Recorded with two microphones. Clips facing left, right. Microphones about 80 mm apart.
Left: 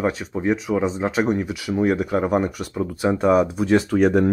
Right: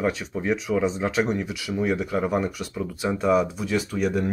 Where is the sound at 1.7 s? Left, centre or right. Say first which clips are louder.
Left 4 dB; left.